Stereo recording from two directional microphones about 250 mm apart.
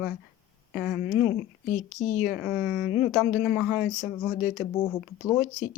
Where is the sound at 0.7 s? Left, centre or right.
Centre.